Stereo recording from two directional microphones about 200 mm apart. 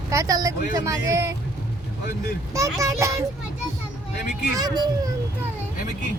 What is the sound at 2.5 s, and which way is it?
Speech, 15° right (ahead or behind).